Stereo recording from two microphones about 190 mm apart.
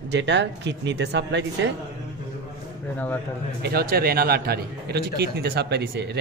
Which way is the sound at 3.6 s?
55° right (ahead or behind).